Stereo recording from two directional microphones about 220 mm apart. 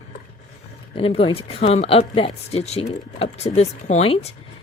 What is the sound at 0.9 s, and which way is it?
Speech, 25° left (ahead or behind).